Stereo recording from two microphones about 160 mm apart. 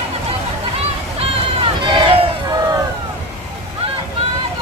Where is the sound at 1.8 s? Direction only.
30° right (ahead or behind).